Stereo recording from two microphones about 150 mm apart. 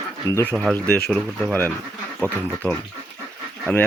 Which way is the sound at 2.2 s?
5° left (ahead or behind).